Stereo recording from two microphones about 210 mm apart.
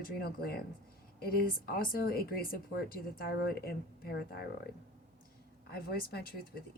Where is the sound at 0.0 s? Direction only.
45° left (ahead or behind).